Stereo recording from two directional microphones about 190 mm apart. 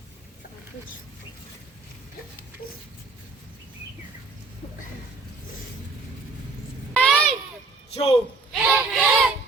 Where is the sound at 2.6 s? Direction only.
30° left (ahead or behind).